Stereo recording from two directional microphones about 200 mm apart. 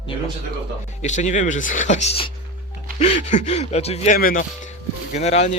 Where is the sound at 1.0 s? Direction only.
35° left (ahead or behind).